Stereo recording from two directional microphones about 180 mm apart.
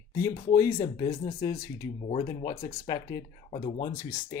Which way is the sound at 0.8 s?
35° left (ahead or behind).